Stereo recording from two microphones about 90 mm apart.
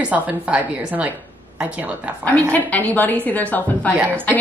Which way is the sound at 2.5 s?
20° left (ahead or behind).